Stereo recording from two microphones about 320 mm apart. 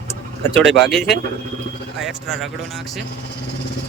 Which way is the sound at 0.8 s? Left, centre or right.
Centre.